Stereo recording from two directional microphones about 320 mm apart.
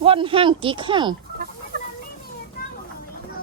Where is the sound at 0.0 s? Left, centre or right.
Centre.